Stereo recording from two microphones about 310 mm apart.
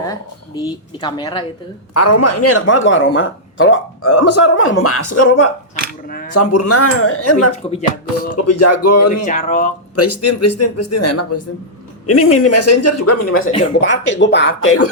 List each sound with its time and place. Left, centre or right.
0.0 s speech: centre
1.9 s speech: left
6.1 s speech: left
6.3 s speech: left
9.2 s speech: left
9.9 s speech: left
13.3 s speech: left
13.8 s speech: left